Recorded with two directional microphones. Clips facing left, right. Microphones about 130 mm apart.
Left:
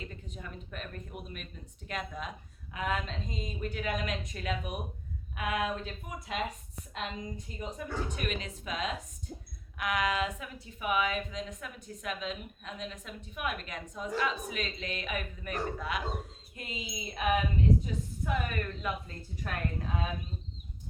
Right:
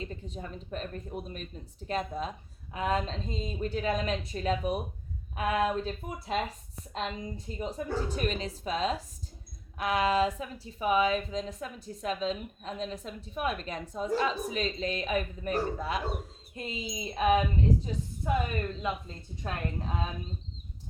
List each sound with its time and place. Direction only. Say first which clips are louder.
0.0 s a woman's voice: right 5 dB; 30° right (ahead or behind)